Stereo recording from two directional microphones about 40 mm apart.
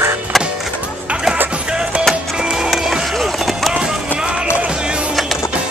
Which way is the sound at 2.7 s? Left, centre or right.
Centre.